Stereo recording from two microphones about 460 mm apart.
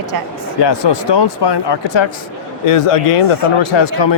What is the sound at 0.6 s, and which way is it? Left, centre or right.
Speech, left.